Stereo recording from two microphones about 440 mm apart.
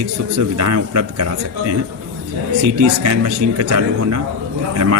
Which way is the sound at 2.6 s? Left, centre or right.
Right.